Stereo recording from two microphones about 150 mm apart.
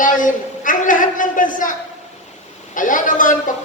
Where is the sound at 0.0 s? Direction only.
60° left (ahead or behind).